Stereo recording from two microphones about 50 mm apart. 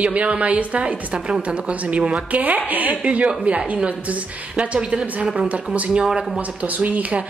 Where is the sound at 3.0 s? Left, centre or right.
Right.